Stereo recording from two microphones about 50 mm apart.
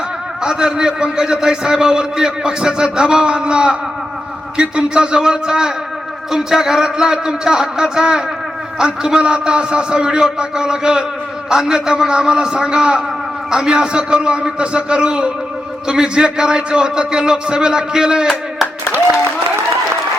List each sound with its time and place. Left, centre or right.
0.4 s a man's voice: centre